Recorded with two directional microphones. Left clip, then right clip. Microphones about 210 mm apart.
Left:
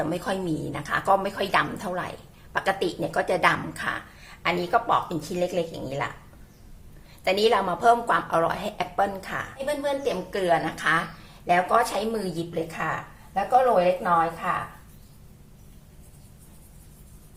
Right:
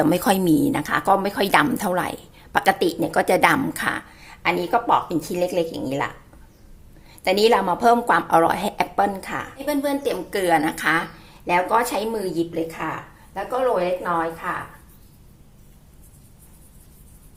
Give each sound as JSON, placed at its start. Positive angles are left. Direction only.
{"t": 0.0, "sound": "a woman's voice", "side_deg": -45}
{"t": 7.3, "sound": "a woman's voice", "side_deg": -35}